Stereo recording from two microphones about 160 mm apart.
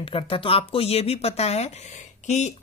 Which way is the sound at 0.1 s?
35° left (ahead or behind).